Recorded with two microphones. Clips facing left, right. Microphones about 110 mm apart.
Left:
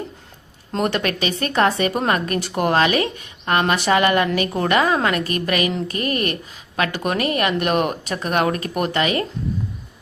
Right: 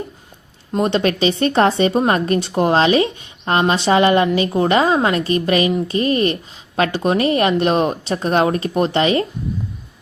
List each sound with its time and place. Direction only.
0.7 s speech: 20° right (ahead or behind)